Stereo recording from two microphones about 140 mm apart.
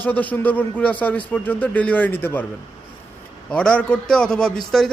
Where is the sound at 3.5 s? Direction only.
5° left (ahead or behind).